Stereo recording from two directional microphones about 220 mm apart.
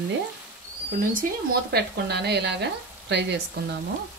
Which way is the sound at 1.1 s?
40° right (ahead or behind).